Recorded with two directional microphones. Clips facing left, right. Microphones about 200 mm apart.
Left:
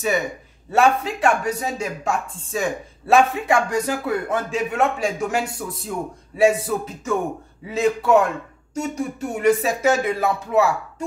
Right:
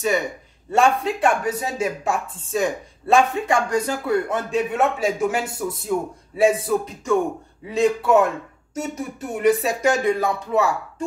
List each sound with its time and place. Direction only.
0.7 s speech: centre (ahead or behind)
5.9 s a man's voice: 45° right (ahead or behind)
6.3 s speech: centre (ahead or behind)